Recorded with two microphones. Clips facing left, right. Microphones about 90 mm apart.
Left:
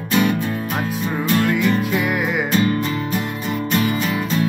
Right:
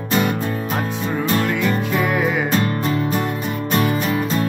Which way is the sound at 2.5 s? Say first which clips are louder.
Left 1 dB; 40° right (ahead or behind).